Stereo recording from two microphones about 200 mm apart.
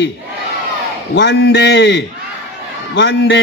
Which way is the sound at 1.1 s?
55° left (ahead or behind).